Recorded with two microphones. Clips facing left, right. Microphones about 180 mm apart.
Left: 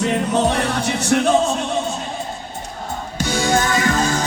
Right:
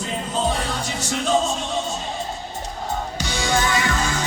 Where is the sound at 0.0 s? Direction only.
75° left (ahead or behind).